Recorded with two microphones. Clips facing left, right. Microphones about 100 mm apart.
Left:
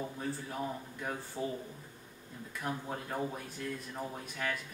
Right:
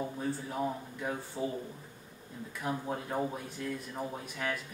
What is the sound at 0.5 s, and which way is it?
A man's voice, 15° right (ahead or behind).